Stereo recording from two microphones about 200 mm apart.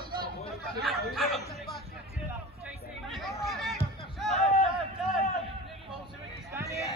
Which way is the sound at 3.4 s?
Centre (ahead or behind).